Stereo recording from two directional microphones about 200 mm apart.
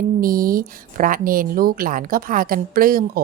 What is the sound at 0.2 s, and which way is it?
Speech, 45° right (ahead or behind).